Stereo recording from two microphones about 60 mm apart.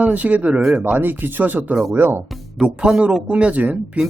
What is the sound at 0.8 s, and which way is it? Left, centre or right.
Speech, right.